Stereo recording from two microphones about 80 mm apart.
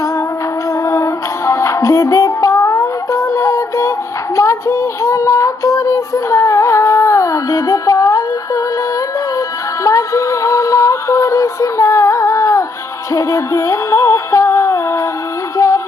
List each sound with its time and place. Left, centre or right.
0.9 s music: left
4.4 s child singing: left
9.8 s music: left
13.1 s synthetic singing: left
15.5 s music: left